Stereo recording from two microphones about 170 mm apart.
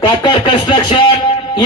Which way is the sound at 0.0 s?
25° left (ahead or behind).